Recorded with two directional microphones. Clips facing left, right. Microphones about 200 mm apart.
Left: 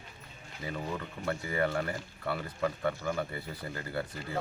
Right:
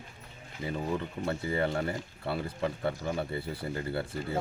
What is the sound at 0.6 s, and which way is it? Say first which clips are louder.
Speech: right 4 dB; 25° right (ahead or behind).